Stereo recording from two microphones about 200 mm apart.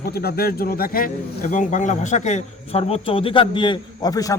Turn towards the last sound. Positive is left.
turn(degrees=20)  # may be behind; listen again after turning